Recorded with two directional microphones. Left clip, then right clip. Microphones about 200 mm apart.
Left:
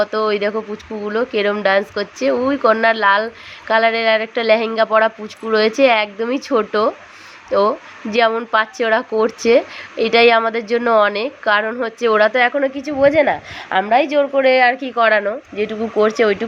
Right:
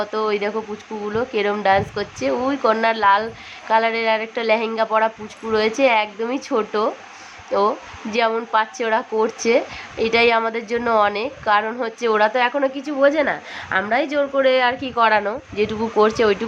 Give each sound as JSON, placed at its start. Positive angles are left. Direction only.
{"t": 0.0, "sound": "speech", "side_deg": 15}